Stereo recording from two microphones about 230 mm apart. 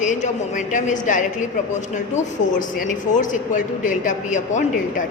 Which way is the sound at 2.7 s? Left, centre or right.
Left.